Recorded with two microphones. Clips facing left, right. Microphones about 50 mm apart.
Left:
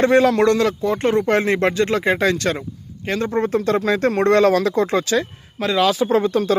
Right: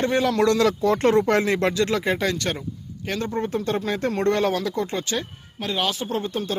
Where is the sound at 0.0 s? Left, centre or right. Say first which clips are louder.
Left 6 dB; left.